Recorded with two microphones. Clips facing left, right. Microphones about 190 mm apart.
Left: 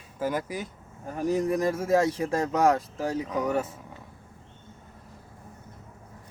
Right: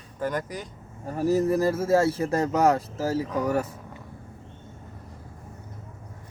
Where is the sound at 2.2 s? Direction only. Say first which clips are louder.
Right 2 dB; 5° right (ahead or behind).